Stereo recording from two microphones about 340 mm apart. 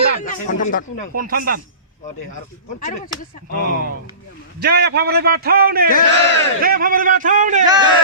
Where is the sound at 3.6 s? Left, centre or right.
Left.